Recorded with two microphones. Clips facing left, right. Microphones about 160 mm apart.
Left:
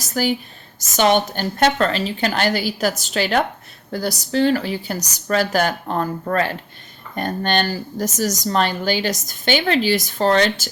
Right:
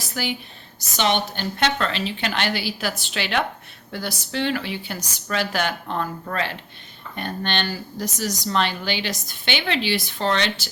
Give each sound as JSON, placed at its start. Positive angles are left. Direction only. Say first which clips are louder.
{"t": 0.0, "sound": "a woman's voice", "louder": "left 7 dB", "side_deg": 40}